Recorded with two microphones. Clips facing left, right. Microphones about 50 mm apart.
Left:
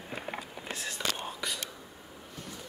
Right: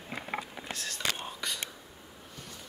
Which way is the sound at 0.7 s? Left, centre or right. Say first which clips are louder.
Left 4 dB; centre.